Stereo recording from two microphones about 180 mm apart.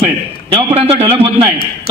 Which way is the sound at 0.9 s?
30° right (ahead or behind).